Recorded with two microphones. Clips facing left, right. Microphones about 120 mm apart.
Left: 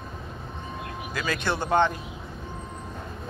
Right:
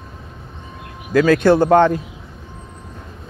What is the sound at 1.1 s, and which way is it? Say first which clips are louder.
Speech: right 16 dB; 60° right (ahead or behind).